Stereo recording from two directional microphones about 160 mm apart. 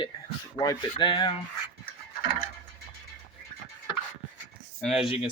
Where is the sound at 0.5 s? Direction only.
25° left (ahead or behind).